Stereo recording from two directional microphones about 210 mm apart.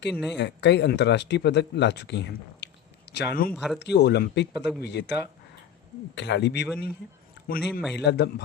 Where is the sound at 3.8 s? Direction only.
55° left (ahead or behind).